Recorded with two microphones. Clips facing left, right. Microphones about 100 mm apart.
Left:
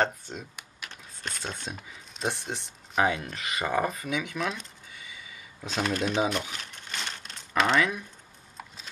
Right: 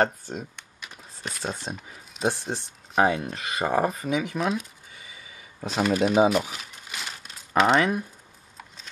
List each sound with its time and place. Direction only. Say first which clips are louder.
0.0 s speech: right 4 dB; 40° right (ahead or behind)
0.8 s a sound: right 2 dB; 5° right (ahead or behind)
1.7 s speech: right 3 dB; 35° right (ahead or behind)
2.1 s speech: right 5 dB; centre (ahead or behind)
3.0 s speech: right 4 dB; 35° right (ahead or behind)
5.0 s a sound: left 1 dB; 35° right (ahead or behind)
5.7 s speech: right 6 dB; 5° right (ahead or behind)
6.3 s crumpling: right 7 dB; 5° right (ahead or behind)
7.7 s speech: right 4 dB; 35° right (ahead or behind)